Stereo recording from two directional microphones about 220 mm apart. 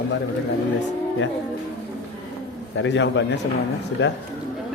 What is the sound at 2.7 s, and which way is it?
Speech, 55° left (ahead or behind).